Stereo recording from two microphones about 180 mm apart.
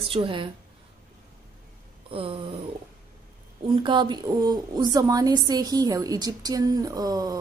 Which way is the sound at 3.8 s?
25° right (ahead or behind).